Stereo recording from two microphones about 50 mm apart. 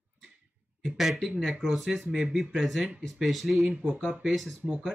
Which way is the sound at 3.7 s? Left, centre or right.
Right.